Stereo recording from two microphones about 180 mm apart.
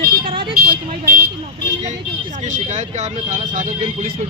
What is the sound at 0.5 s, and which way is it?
Speech, 55° right (ahead or behind).